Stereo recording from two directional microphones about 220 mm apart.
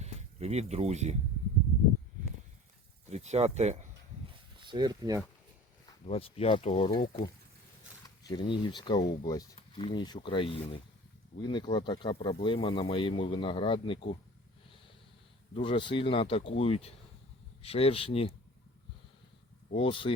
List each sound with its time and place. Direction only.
0.0 s speech: 30° right (ahead or behind)
3.1 s speech: 30° right (ahead or behind)
4.6 s speech: 20° right (ahead or behind)
6.1 s speech: 25° left (ahead or behind)
8.0 s speech: 20° left (ahead or behind)
15.5 s speech: 25° left (ahead or behind)
19.7 s speech: 25° left (ahead or behind)